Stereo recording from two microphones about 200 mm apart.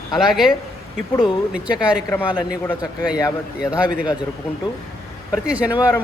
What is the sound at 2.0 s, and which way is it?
Speech, 15° left (ahead or behind).